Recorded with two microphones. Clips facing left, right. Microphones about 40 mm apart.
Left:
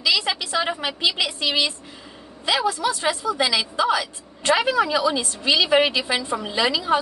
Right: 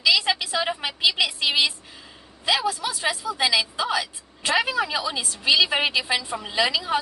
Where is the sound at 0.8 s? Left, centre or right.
Centre.